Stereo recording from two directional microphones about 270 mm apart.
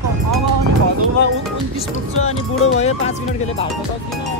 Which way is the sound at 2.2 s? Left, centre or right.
Left.